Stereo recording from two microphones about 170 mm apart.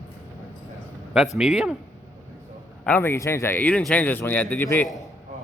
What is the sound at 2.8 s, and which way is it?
Speech, 10° left (ahead or behind).